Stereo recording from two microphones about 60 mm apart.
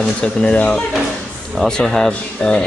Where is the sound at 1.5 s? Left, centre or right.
Centre.